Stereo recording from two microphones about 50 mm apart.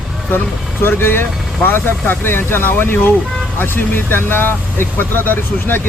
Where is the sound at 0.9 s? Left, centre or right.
Left.